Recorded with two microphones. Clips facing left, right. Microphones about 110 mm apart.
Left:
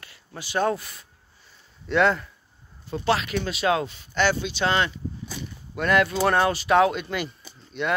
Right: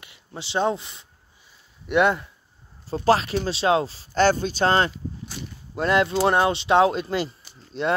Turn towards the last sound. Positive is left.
turn(degrees=-35)  # may be behind; listen again after turning